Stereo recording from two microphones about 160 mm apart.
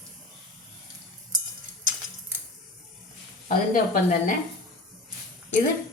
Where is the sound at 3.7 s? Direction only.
55° left (ahead or behind).